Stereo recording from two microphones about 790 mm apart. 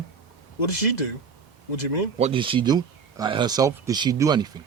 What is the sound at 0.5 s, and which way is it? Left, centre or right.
Speech, left.